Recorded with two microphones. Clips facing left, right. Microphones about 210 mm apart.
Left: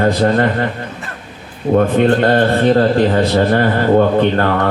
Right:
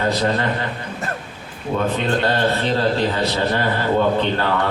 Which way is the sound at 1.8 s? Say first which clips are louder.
Left 8 dB; 50° left (ahead or behind).